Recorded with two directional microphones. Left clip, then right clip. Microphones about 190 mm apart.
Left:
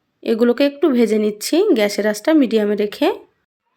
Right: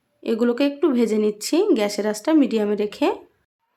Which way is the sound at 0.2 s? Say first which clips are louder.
Left 5 dB; 15° left (ahead or behind).